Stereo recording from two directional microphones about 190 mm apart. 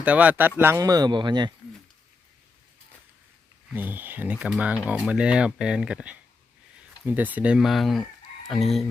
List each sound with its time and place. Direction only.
0.0 s speech: 5° right (ahead or behind); by 1.5 s 25° right (ahead or behind)
3.8 s speech: 10° right (ahead or behind)